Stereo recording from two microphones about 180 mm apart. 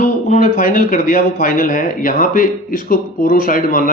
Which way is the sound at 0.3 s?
50° left (ahead or behind).